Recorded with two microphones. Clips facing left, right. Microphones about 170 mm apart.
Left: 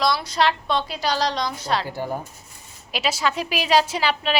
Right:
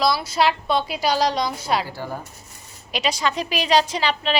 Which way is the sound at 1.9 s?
20° left (ahead or behind).